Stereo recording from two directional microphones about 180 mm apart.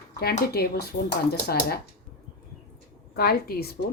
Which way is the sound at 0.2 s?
60° left (ahead or behind).